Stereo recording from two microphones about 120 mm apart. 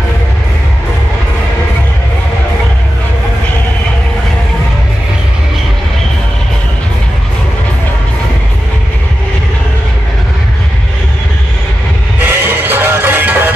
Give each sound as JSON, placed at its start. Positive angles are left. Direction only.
{"t": 12.2, "sound": "music", "side_deg": -15}